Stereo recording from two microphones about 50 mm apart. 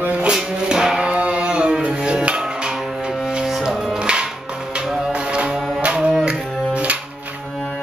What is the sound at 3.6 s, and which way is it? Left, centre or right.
Music, centre.